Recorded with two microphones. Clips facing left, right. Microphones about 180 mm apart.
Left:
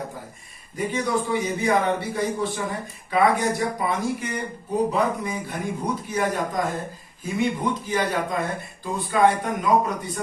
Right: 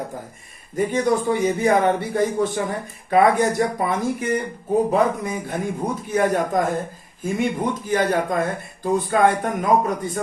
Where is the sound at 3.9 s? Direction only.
50° right (ahead or behind).